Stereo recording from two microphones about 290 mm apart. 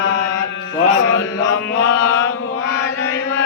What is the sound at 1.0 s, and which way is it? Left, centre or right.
Chant, left.